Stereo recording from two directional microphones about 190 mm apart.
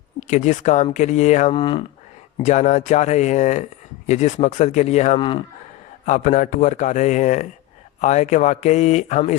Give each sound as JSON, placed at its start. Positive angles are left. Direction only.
{"t": 0.2, "sound": "speech", "side_deg": 40}
{"t": 1.5, "sound": "speech", "side_deg": 25}
{"t": 2.4, "sound": "speech", "side_deg": 40}
{"t": 6.1, "sound": "speech", "side_deg": 40}